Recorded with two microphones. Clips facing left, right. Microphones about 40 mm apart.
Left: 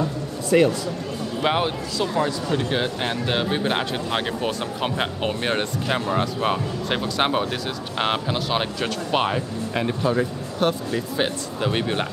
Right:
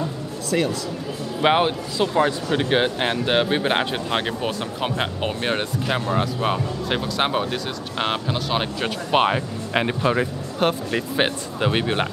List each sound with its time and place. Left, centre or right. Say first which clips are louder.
0.5 s speech: left 5 dB; centre
1.4 s speech: right 4 dB; centre
9.1 s speech: right 4 dB; centre
9.8 s speech: right 2 dB; right
11.6 s speech: right 2 dB; centre